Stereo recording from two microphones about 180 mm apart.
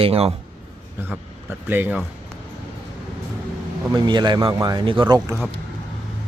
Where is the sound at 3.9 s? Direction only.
25° right (ahead or behind).